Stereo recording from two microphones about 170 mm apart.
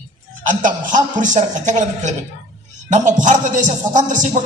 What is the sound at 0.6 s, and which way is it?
Music, 50° right (ahead or behind).